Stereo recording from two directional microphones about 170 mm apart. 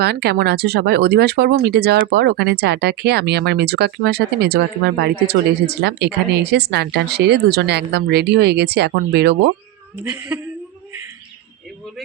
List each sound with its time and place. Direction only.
0.0 s speech: 70° right (ahead or behind)
10.0 s speech: 10° right (ahead or behind)